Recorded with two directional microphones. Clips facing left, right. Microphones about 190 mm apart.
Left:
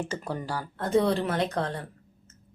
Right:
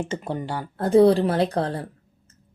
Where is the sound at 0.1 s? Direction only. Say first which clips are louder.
Right 4 dB; 25° right (ahead or behind).